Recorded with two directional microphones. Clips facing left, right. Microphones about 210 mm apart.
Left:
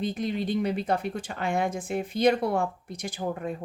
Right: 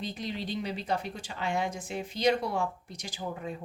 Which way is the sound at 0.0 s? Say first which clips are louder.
Left 7 dB; 50° left (ahead or behind).